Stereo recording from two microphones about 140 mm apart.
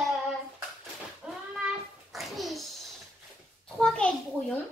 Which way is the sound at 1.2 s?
10° right (ahead or behind).